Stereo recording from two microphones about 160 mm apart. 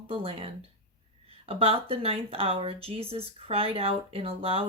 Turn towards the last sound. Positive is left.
turn(degrees=-35)  # may be behind; listen again after turning